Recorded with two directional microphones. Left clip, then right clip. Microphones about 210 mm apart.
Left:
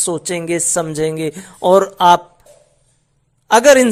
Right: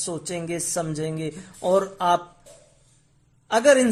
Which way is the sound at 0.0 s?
25° left (ahead or behind).